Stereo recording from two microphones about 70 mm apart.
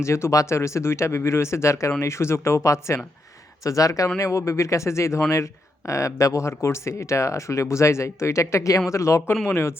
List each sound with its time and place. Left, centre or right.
0.0 s a man's voice: left